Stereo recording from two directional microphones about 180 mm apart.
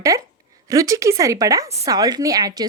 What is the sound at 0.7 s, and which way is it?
Speech, 20° right (ahead or behind).